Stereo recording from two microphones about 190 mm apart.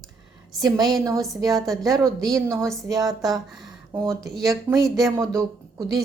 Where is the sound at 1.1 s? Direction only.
Centre (ahead or behind).